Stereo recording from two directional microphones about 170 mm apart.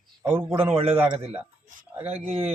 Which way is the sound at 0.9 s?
15° right (ahead or behind).